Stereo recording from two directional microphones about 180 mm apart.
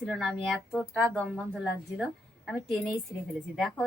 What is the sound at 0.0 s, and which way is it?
Speech, centre (ahead or behind).